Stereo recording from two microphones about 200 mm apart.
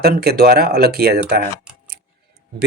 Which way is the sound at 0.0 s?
50° right (ahead or behind).